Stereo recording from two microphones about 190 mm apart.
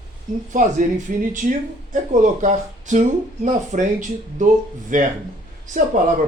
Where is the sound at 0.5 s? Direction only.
40° right (ahead or behind).